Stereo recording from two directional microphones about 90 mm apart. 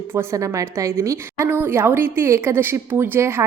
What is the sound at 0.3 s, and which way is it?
A woman's voice, 35° right (ahead or behind).